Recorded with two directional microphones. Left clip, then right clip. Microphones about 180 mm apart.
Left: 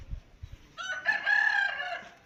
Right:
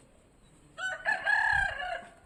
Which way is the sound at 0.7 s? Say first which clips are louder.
Left 1 dB; 60° left (ahead or behind).